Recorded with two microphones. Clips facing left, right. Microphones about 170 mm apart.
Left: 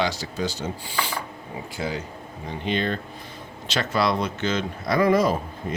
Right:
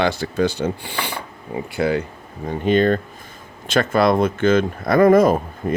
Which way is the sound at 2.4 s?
45° right (ahead or behind).